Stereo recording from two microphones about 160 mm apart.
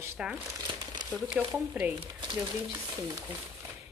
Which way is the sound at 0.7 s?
30° right (ahead or behind).